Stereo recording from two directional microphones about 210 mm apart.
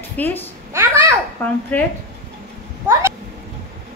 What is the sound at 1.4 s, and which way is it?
Speech, 10° left (ahead or behind).